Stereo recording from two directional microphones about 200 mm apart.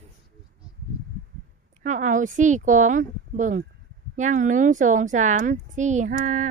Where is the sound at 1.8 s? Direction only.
40° right (ahead or behind).